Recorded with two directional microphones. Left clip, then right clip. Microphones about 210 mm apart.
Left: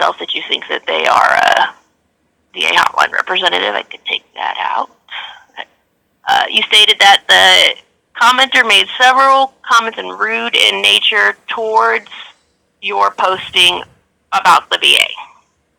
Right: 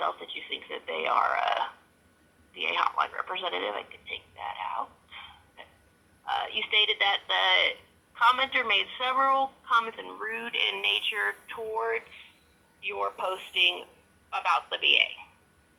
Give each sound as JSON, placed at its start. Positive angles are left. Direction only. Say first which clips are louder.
{"t": 0.0, "sound": "speech", "louder": "left 17 dB", "side_deg": 50}